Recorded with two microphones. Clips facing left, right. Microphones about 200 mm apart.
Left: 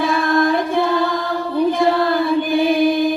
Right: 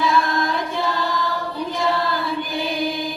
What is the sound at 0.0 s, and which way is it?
Choir, 55° left (ahead or behind).